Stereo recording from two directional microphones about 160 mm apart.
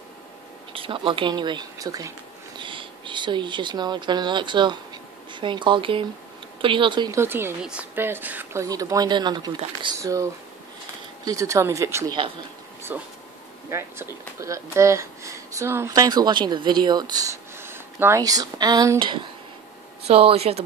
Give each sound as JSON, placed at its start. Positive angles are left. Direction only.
{"t": 0.7, "sound": "speech", "side_deg": -30}
{"t": 7.2, "sound": "speech", "side_deg": -15}
{"t": 8.6, "sound": "speech", "side_deg": -20}